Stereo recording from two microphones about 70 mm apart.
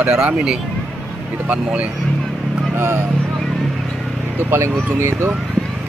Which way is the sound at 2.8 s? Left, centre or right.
Right.